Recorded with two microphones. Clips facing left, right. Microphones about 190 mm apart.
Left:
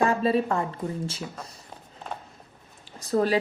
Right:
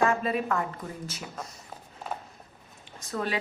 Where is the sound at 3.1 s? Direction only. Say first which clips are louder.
Left 8 dB; 35° left (ahead or behind).